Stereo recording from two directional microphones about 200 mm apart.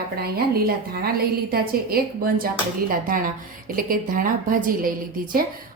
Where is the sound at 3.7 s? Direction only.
45° right (ahead or behind).